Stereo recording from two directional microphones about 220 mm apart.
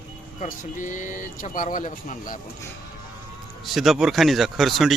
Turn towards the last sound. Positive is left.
turn(degrees=0)  # may be behind; listen again after turning